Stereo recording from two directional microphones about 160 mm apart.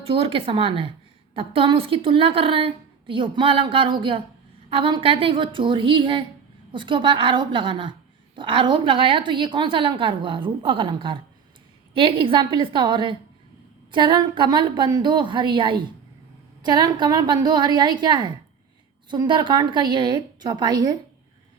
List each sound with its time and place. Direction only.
0.0 s a woman's voice: 35° right (ahead or behind)